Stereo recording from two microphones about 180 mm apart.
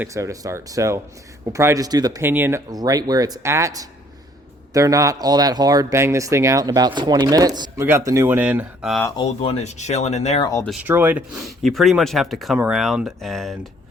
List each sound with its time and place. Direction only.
0.0 s speech: 15° right (ahead or behind)
9.2 s speech: 35° left (ahead or behind)
10.8 s speech: 10° right (ahead or behind)